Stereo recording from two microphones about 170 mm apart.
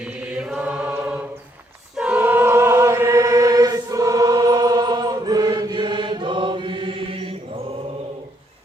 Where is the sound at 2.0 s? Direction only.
10° right (ahead or behind); by 7.3 s 30° right (ahead or behind).